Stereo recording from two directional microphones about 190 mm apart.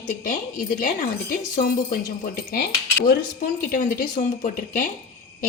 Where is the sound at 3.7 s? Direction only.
45° left (ahead or behind).